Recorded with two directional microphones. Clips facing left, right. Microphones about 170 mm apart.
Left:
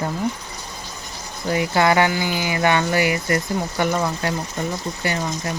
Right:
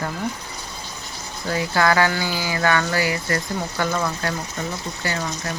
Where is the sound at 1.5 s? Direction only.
20° left (ahead or behind).